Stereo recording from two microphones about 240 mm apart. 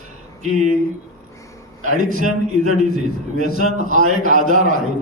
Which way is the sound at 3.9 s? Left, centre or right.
Right.